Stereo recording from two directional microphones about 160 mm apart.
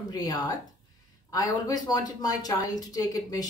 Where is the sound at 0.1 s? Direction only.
25° left (ahead or behind).